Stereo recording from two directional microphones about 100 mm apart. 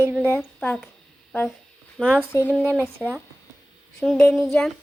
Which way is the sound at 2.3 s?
25° left (ahead or behind).